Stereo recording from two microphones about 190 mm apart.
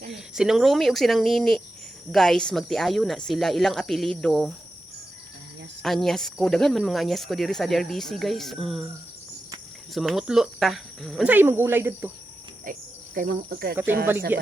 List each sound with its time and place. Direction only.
0.1 s speech: centre (ahead or behind)
5.8 s speech: centre (ahead or behind)
9.9 s speech: centre (ahead or behind)
12.7 s cricket: 45° right (ahead or behind)
14.3 s speech: 10° right (ahead or behind)